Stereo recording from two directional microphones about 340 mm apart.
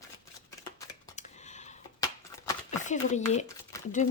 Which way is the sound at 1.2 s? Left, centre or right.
Centre.